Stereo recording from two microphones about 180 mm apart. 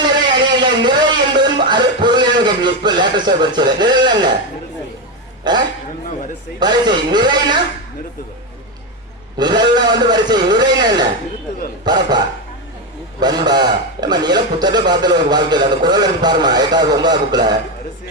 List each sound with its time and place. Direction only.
0.3 s speech: 25° right (ahead or behind)
5.5 s a man's voice: 25° right (ahead or behind)
9.4 s a man's voice: 25° right (ahead or behind)